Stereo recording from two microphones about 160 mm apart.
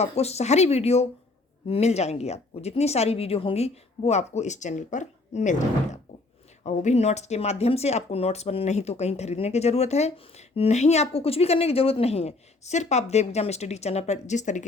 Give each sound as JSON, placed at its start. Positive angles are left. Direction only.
{"t": 0.0, "sound": "speech", "side_deg": 40}